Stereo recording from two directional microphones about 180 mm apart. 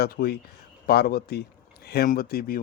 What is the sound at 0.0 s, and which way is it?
Speech, 60° left (ahead or behind).